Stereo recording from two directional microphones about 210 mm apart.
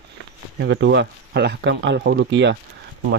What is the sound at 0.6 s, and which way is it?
Speech, 60° right (ahead or behind).